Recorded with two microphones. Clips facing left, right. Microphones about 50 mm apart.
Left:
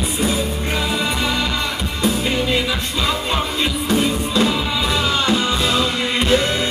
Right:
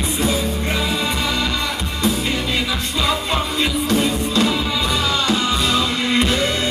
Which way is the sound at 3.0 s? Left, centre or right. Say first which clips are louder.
Right 1 dB; centre.